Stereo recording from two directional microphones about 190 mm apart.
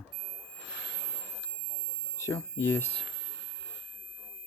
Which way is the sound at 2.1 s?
15° left (ahead or behind).